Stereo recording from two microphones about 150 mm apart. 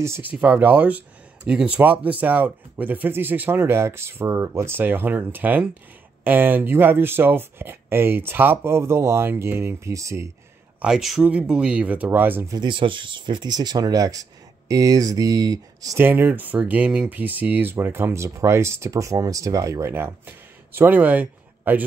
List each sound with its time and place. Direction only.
0.0 s speech: 15° right (ahead or behind)
10.8 s speech: 5° right (ahead or behind)
12.5 s speech: 35° right (ahead or behind); by 21.8 s 10° right (ahead or behind)